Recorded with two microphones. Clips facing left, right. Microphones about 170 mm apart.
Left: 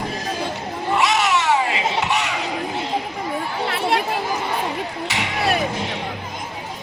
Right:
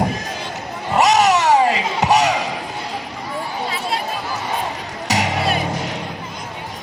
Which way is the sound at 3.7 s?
65° left (ahead or behind).